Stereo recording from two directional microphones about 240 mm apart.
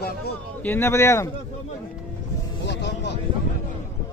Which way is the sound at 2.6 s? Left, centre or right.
Left.